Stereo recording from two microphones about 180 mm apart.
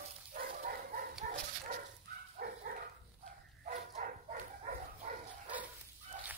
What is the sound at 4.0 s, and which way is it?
Dog, 45° right (ahead or behind).